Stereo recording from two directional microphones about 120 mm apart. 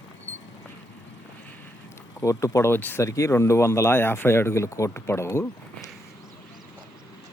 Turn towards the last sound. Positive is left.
turn(degrees=20)  # may be behind; listen again after turning